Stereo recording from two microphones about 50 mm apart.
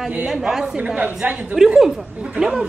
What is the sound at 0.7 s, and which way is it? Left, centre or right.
Speech, right.